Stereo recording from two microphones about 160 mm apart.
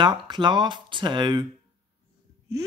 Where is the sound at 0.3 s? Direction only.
30° right (ahead or behind).